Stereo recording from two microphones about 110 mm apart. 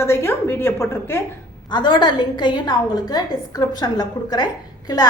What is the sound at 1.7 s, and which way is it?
A woman's voice, 45° left (ahead or behind).